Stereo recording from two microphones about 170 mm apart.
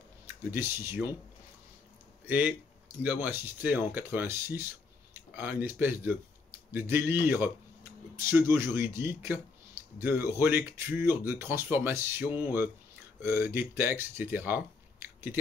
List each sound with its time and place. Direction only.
0.5 s speech: 15° right (ahead or behind)
2.2 s speech: 10° right (ahead or behind)